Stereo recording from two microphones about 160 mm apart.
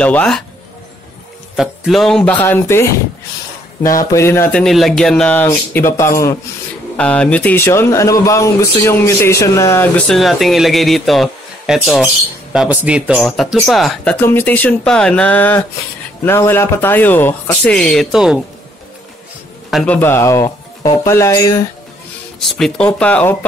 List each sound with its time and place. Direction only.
0.0 s speech: 5° left (ahead or behind)
1.6 s speech: centre (ahead or behind)
4.0 s speech: 20° left (ahead or behind)
10.0 s speech: centre (ahead or behind)
14.2 s speech: 15° left (ahead or behind); by 18.4 s 5° right (ahead or behind)
19.7 s speech: 5° left (ahead or behind)
22.8 s speech: 10° left (ahead or behind)